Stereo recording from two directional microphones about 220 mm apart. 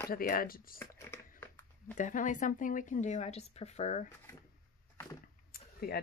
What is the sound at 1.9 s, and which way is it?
Speech, 35° left (ahead or behind).